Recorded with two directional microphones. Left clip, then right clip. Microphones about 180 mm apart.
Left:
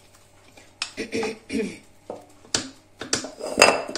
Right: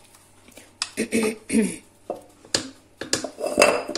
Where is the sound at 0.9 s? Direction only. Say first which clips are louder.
Right 4 dB; 65° right (ahead or behind).